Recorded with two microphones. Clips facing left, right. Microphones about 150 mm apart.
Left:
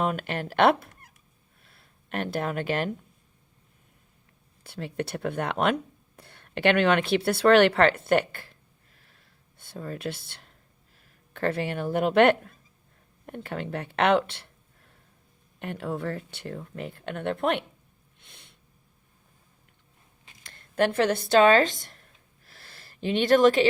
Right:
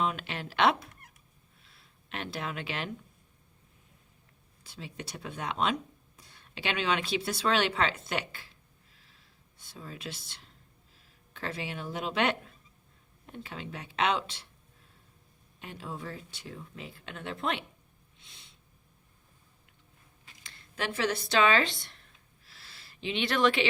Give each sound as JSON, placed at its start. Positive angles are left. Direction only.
{"t": 0.0, "sound": "speech", "side_deg": 50}
{"t": 4.6, "sound": "speech", "side_deg": 60}
{"t": 15.5, "sound": "speech", "side_deg": 60}
{"t": 18.2, "sound": "snort", "side_deg": 55}
{"t": 20.4, "sound": "speech", "side_deg": 55}
{"t": 22.4, "sound": "a sound", "side_deg": 55}